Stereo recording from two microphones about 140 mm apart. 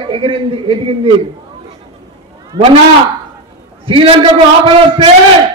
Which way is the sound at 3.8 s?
40° right (ahead or behind).